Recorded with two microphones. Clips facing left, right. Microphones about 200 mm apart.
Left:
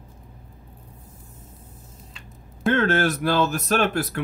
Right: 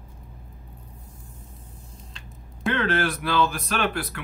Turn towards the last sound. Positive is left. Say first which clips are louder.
# left 5 dB
turn(degrees=45)  # may be behind; listen again after turning